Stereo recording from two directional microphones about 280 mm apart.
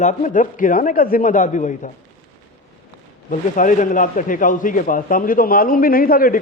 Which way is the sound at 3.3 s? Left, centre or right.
Left.